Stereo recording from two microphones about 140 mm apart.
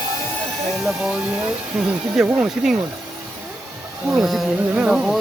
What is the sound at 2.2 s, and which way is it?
Speech, 5° right (ahead or behind).